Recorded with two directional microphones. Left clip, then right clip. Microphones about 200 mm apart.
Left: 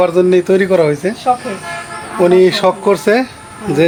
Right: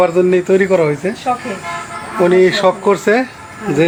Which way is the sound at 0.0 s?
20° left (ahead or behind).